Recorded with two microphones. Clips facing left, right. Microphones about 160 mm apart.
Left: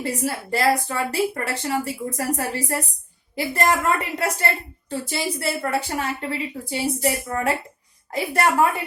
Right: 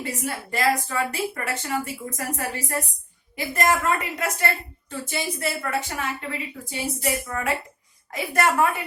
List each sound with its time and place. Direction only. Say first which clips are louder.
0.0 s speech: left 4 dB; 35° left (ahead or behind)